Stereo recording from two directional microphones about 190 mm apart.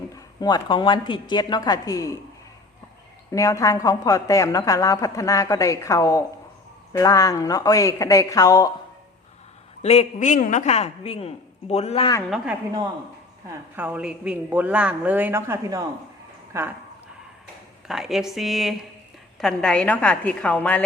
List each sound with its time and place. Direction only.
0.3 s a woman's voice: 20° left (ahead or behind)
3.3 s a woman's voice: 15° left (ahead or behind)
9.8 s a woman's voice: 35° left (ahead or behind)
13.5 s a man's voice: 10° right (ahead or behind)
17.8 s a woman's voice: centre (ahead or behind)